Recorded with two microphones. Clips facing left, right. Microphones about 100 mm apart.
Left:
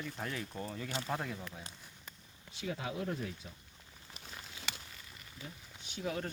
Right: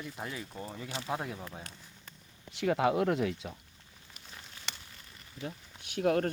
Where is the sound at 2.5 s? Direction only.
75° right (ahead or behind); by 3.5 s 90° right.